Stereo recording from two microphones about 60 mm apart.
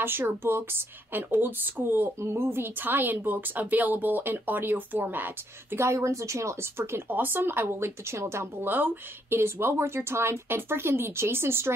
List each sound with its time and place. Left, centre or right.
0.0 s speech: right
2.1 s speech: right
7.1 s speech: right
8.6 s speech: right